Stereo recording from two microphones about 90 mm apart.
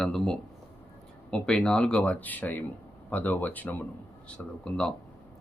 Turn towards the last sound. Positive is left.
turn(degrees=10)  # may be behind; listen again after turning